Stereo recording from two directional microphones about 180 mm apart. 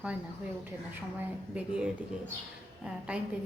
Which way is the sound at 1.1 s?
5° right (ahead or behind).